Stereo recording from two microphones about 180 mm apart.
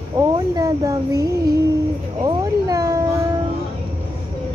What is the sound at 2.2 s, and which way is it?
Cat, 20° right (ahead or behind).